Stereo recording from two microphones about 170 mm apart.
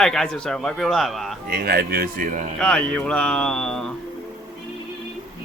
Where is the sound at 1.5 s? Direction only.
65° right (ahead or behind).